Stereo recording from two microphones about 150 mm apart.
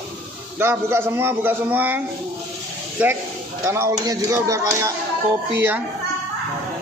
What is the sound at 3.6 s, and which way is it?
A man's voice, 20° right (ahead or behind).